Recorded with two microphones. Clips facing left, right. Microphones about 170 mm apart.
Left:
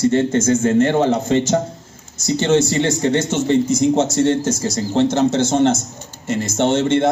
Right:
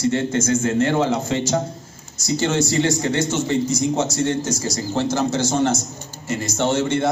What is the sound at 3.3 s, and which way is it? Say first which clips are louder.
A man's voice: left 4 dB; 55° left (ahead or behind).